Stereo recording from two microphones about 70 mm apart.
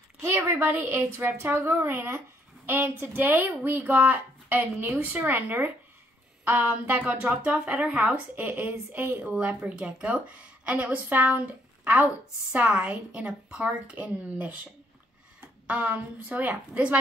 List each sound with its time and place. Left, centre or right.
0.2 s a woman's voice: right